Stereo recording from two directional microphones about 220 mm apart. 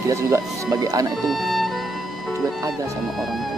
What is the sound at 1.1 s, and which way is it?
Music, centre (ahead or behind).